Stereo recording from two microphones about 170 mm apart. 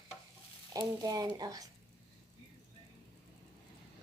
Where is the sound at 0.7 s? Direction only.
20° right (ahead or behind).